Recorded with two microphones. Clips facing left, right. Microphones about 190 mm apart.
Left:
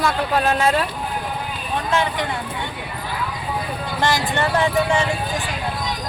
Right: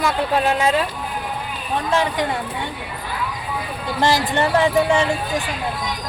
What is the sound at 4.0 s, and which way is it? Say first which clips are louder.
Speech: right 3 dB; 35° right (ahead or behind).